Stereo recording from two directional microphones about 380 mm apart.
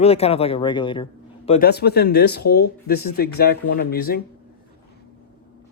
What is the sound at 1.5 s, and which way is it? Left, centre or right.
A man's voice, left.